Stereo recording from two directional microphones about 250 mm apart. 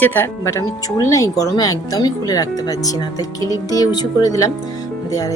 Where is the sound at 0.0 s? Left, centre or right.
Centre.